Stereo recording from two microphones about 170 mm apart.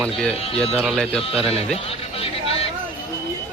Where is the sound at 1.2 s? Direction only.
35° left (ahead or behind).